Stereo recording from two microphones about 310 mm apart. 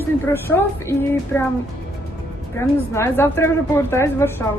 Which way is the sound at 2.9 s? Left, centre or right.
Centre.